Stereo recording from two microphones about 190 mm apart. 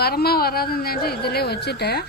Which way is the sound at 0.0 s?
55° left (ahead or behind).